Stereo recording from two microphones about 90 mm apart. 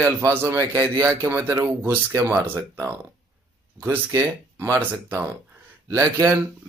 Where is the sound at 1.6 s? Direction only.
40° right (ahead or behind).